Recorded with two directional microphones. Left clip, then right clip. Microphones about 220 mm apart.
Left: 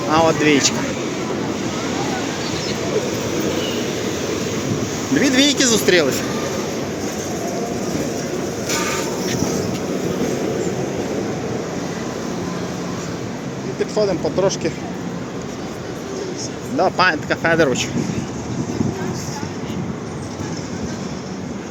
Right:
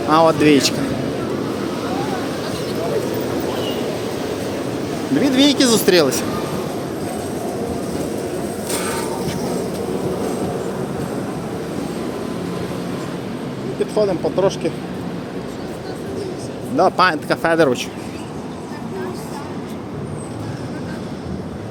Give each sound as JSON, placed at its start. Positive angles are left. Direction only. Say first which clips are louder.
{"t": 0.1, "sound": "speech", "louder": "right 2 dB", "side_deg": -20}
{"t": 5.2, "sound": "speech", "louder": "right 1 dB", "side_deg": -5}
{"t": 5.8, "sound": "speech", "louder": "right 1 dB", "side_deg": -20}
{"t": 13.9, "sound": "speech", "louder": "right 1 dB", "side_deg": -10}
{"t": 16.7, "sound": "speech", "louder": "right 2 dB", "side_deg": -15}